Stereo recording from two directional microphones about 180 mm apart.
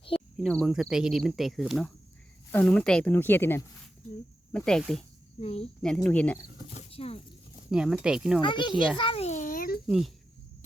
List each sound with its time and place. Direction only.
0.1 s speech: centre (ahead or behind)
5.4 s a child's voice: 35° left (ahead or behind)
5.8 s speech: 5° left (ahead or behind)
6.9 s speech: 35° left (ahead or behind)
7.7 s speech: 5° right (ahead or behind)
8.4 s a child's voice: 25° left (ahead or behind); by 9.8 s 50° left (ahead or behind)
9.8 s speech: centre (ahead or behind)